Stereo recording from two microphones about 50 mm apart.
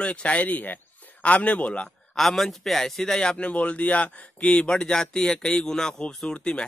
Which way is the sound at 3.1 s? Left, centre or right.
Left.